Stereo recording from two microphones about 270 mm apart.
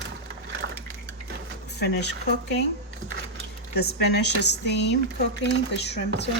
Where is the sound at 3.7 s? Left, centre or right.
Left.